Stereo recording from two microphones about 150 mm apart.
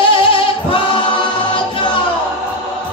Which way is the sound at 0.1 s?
35° left (ahead or behind).